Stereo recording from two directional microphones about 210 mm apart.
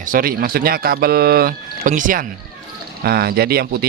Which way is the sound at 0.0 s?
40° right (ahead or behind).